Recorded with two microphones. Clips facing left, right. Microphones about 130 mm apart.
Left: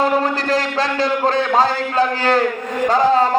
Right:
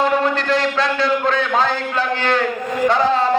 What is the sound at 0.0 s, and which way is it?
A man's voice, 35° left (ahead or behind).